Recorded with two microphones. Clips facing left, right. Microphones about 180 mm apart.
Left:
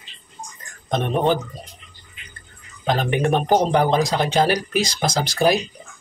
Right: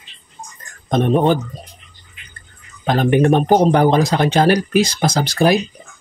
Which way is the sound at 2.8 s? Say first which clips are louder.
Right 6 dB; 50° right (ahead or behind).